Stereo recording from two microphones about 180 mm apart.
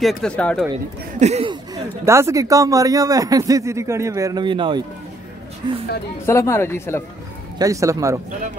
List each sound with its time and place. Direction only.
0.0 s speech: 5° left (ahead or behind)
1.2 s speech: 35° right (ahead or behind)
2.0 s a man's voice: 15° right (ahead or behind)
6.2 s speech: 15° left (ahead or behind)
7.5 s speech: 20° right (ahead or behind)